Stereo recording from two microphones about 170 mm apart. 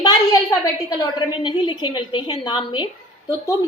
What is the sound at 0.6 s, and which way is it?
A woman's voice, 20° left (ahead or behind).